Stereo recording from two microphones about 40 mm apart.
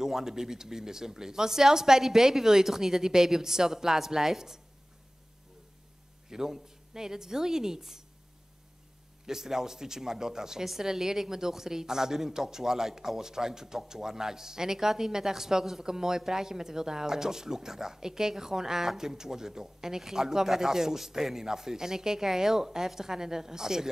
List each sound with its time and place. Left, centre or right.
0.0 s a woman's voice: centre
6.3 s a woman's voice: centre
9.2 s a woman's voice: centre